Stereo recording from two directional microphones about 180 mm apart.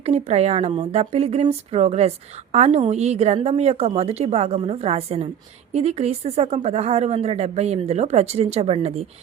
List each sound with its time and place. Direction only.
0.0 s a woman's voice: 35° right (ahead or behind)